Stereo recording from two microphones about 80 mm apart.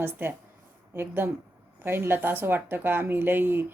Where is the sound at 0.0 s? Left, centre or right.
Right.